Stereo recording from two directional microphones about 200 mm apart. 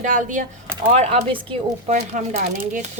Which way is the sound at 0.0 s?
40° right (ahead or behind).